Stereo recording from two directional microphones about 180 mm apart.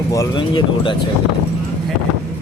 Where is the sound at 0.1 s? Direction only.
20° left (ahead or behind).